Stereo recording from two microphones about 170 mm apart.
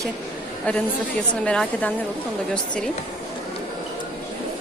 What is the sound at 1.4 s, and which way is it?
Speech, 5° left (ahead or behind).